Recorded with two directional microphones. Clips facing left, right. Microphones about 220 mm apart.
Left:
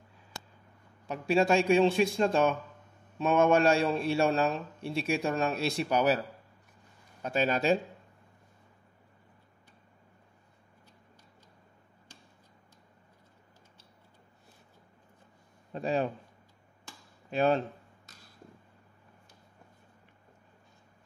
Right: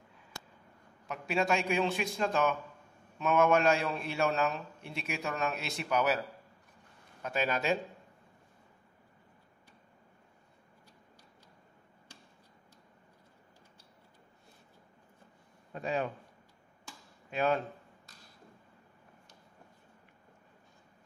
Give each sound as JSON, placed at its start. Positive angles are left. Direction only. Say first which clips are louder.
{"t": 1.0, "sound": "a man's voice", "louder": "left 6 dB", "side_deg": 30}
{"t": 15.7, "sound": "a man's voice", "louder": "left 4 dB", "side_deg": 30}
{"t": 17.3, "sound": "a man's voice", "louder": "left 4 dB", "side_deg": 30}